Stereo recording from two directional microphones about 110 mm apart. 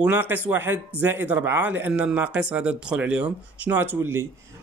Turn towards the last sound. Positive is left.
turn(degrees=-20)  # may be behind; listen again after turning